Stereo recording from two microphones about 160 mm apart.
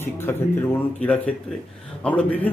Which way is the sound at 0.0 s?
15° left (ahead or behind).